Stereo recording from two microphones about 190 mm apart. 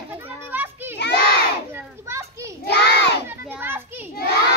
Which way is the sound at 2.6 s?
65° left (ahead or behind).